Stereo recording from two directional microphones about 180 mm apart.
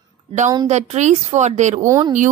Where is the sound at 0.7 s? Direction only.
40° right (ahead or behind).